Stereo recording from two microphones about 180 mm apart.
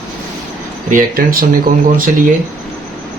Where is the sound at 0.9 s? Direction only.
50° right (ahead or behind).